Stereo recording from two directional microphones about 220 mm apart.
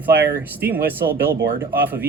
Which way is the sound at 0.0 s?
10° right (ahead or behind).